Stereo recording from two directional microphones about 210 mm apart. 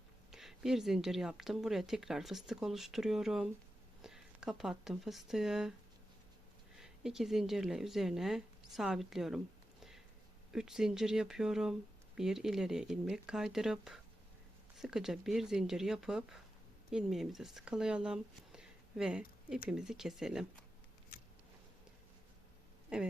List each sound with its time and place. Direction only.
0.3 s speech: centre (ahead or behind)
6.7 s speech: centre (ahead or behind)
10.5 s speech: centre (ahead or behind)
21.1 s a sound: 40° left (ahead or behind)
22.9 s speech: 5° right (ahead or behind)